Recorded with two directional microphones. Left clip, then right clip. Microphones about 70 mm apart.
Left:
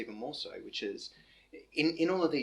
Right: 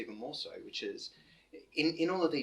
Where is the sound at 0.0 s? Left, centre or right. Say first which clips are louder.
Left 2 dB; left.